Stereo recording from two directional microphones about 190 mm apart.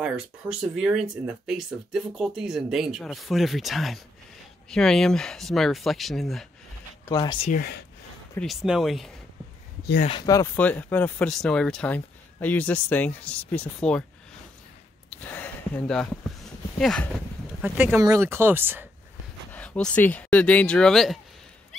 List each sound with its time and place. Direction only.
0.0 s speech: 5° right (ahead or behind)
7.1 s speech: 25° left (ahead or behind)
8.4 s speech: centre (ahead or behind)
10.0 s speech: 20° left (ahead or behind); by 14.0 s 5° left (ahead or behind)
15.0 s a sound: 5° left (ahead or behind)
16.7 s speech: 5° left (ahead or behind)
17.6 s speech: 10° right (ahead or behind)
19.5 s speech: 5° left (ahead or behind)